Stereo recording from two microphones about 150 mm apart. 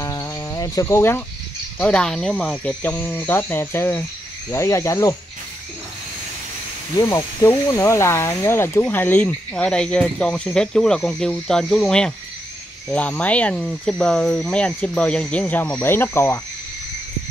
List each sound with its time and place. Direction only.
0.0 s insect: 20° left (ahead or behind)
1.8 s speech: 5° left (ahead or behind)
7.0 s speech: 20° left (ahead or behind)